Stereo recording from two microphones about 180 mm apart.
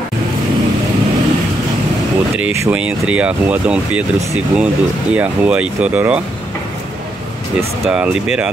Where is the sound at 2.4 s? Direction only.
10° right (ahead or behind).